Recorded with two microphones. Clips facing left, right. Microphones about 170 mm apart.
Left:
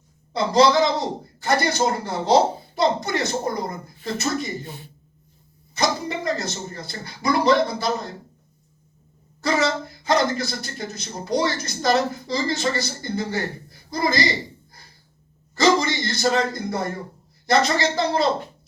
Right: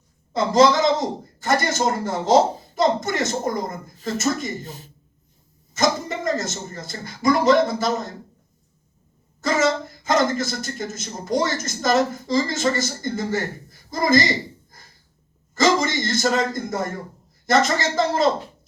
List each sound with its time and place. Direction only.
0.3 s a woman's voice: 45° right (ahead or behind)
9.4 s a woman's voice: 45° right (ahead or behind)
15.5 s a sound: 45° right (ahead or behind)
17.4 s a woman's voice: 45° right (ahead or behind)